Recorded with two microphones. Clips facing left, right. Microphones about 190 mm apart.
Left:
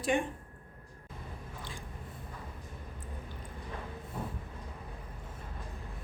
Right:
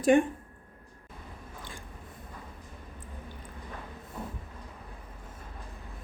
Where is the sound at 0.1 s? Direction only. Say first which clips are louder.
Right 8 dB; 50° right (ahead or behind).